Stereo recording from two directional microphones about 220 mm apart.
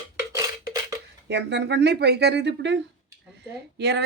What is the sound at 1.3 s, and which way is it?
Speech, 50° right (ahead or behind).